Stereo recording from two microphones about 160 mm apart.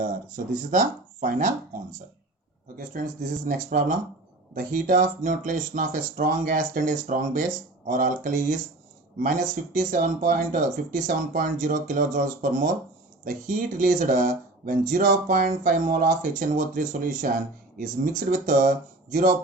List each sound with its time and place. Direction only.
0.0 s speech: 55° right (ahead or behind)
2.7 s speech: 55° right (ahead or behind)